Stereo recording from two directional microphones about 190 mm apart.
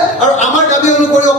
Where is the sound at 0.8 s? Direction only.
40° left (ahead or behind).